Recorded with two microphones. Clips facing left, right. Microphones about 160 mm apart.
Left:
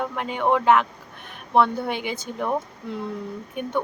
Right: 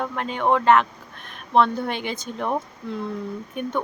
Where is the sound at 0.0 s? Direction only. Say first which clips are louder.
Even; 10° left (ahead or behind).